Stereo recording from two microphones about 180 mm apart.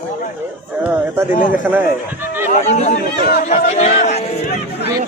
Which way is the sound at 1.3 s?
45° left (ahead or behind).